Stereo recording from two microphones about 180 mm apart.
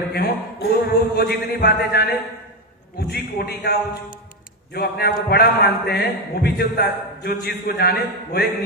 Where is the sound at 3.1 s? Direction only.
65° left (ahead or behind).